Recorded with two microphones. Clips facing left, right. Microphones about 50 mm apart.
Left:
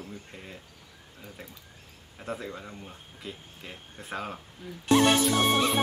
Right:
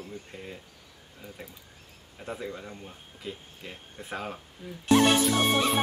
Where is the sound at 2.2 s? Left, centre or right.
Centre.